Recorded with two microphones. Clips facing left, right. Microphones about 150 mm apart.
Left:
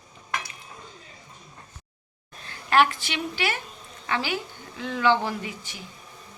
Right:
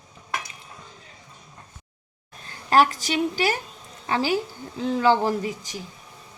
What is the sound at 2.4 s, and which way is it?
A woman's voice, 40° right (ahead or behind).